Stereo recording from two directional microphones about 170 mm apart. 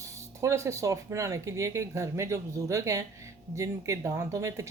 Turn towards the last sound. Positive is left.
turn(degrees=-20)  # may be behind; listen again after turning